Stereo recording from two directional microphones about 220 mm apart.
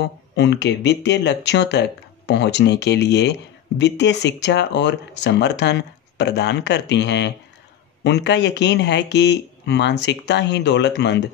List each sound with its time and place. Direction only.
0.0 s speech: 50° left (ahead or behind)